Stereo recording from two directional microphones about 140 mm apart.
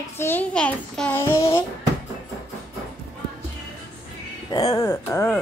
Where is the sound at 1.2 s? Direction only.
20° left (ahead or behind).